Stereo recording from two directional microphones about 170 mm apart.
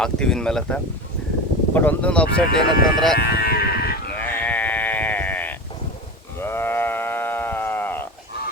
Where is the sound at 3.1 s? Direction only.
60° left (ahead or behind).